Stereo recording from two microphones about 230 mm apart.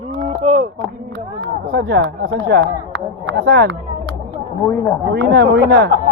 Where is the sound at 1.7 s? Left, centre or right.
Right.